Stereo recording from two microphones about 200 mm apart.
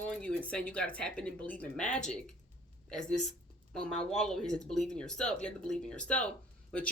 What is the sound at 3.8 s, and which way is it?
Speech, 5° left (ahead or behind).